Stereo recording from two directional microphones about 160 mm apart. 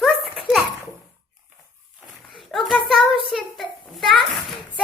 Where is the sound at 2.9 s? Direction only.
Centre (ahead or behind).